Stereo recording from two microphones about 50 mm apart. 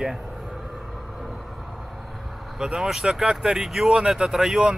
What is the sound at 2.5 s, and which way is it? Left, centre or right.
Speech, centre.